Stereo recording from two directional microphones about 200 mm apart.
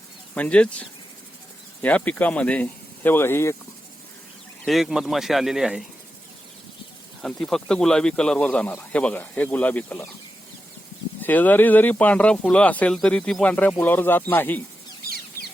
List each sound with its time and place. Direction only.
0.3 s speech: 5° left (ahead or behind)
4.6 s speech: centre (ahead or behind)
7.2 s speech: 5° left (ahead or behind)
11.2 s speech: 10° left (ahead or behind)